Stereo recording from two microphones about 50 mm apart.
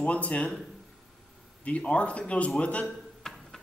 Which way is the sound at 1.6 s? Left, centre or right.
Left.